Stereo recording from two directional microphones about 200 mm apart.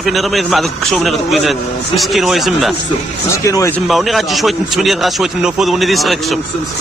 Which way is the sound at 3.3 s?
15° left (ahead or behind).